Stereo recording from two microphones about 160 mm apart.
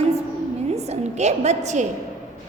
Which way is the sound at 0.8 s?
45° right (ahead or behind).